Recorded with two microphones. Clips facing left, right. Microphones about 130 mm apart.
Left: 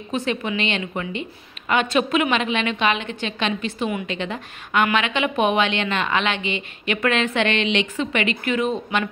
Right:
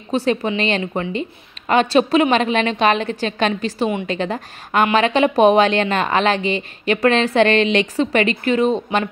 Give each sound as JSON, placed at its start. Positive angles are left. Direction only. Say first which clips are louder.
{"t": 0.1, "sound": "a woman's voice", "louder": "right 5 dB", "side_deg": -35}